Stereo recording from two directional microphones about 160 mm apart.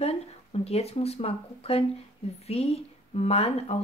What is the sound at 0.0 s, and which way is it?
Speech, 40° left (ahead or behind).